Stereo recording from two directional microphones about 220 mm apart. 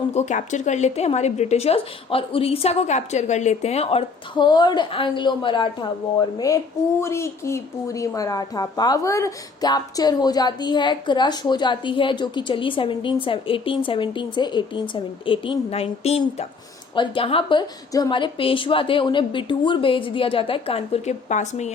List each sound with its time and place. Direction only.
0.1 s a woman's voice: 30° left (ahead or behind)